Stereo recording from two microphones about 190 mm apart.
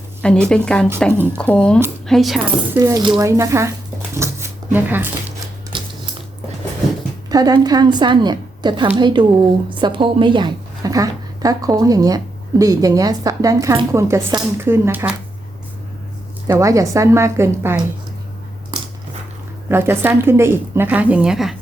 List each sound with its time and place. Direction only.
0.2 s a woman's voice: 5° left (ahead or behind)
2.7 s a woman's voice: 20° right (ahead or behind)
4.1 s shuffling cards: 15° right (ahead or behind)
5.7 s a sound: 25° right (ahead or behind)
7.3 s a woman's voice: 20° right (ahead or behind)
16.5 s a woman's voice: 15° right (ahead or behind)
19.6 s a woman's voice: 10° right (ahead or behind)